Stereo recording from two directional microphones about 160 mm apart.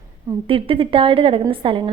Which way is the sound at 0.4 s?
35° right (ahead or behind).